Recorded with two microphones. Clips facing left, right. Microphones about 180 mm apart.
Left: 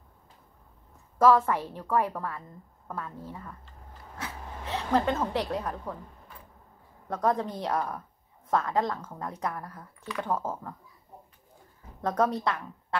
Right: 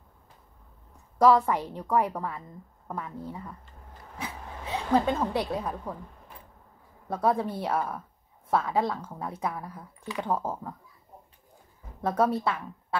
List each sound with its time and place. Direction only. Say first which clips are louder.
1.1 s speech: right 1 dB; 15° right (ahead or behind)
4.2 s a sound: right 1 dB; 10° right (ahead or behind)
5.2 s speech: right 1 dB; 15° right (ahead or behind)
7.1 s speech: right 1 dB; 10° right (ahead or behind)
12.0 s speech: right 1 dB; 10° right (ahead or behind)